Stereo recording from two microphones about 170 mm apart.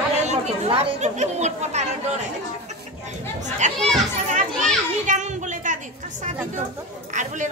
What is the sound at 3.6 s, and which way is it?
Speech, 45° right (ahead or behind).